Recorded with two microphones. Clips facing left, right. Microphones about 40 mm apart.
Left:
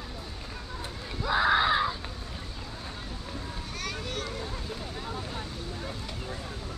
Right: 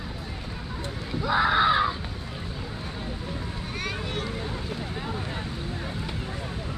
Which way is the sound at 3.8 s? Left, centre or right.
Right.